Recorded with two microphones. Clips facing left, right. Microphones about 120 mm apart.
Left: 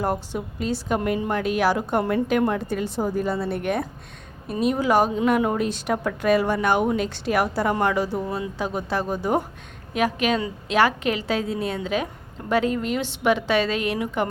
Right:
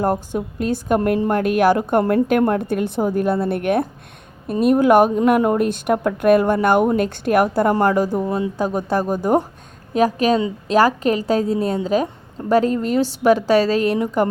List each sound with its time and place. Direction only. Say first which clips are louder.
0.0 s a woman's voice: right 5 dB; 45° right (ahead or behind)